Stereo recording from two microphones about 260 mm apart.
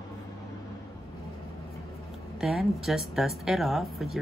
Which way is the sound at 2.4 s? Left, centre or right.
Centre.